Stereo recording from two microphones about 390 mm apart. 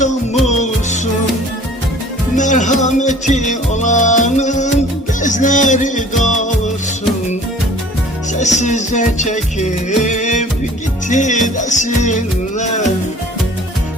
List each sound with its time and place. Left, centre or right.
0.4 s music: centre
2.3 s music: centre
8.3 s music: centre